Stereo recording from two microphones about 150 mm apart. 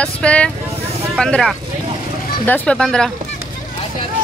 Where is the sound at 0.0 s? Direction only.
5° left (ahead or behind).